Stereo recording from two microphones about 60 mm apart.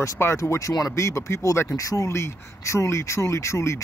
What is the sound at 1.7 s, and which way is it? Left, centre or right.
Speech, left.